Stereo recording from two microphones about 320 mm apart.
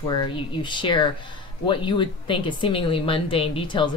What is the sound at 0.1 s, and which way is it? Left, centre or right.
Speech, centre.